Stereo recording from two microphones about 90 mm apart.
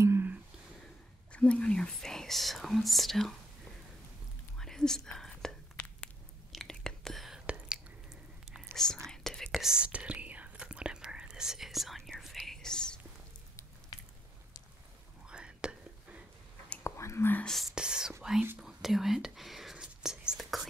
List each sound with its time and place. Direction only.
0.0 s a sound: 30° right (ahead or behind)
1.3 s speech: 10° left (ahead or behind)
4.6 s whispering: 5° left (ahead or behind)
5.8 s a sound: 15° left (ahead or behind)
6.5 s whispering: 5° left (ahead or behind)
9.0 s whispering: 5° left (ahead or behind)
9.5 s whispering: 5° right (ahead or behind)
15.2 s whispering: 10° right (ahead or behind)
16.8 s whispering: 30° left (ahead or behind)
17.5 s whispering: centre (ahead or behind)